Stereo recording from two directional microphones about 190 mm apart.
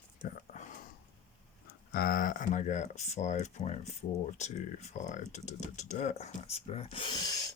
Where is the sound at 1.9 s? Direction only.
50° left (ahead or behind).